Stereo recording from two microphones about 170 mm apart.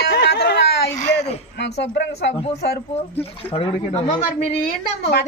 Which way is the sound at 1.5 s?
90° left.